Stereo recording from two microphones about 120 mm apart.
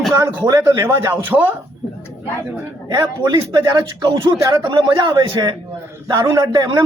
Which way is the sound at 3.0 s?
35° right (ahead or behind).